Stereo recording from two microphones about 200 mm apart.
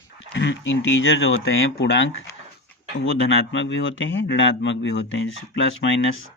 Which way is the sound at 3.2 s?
65° left (ahead or behind).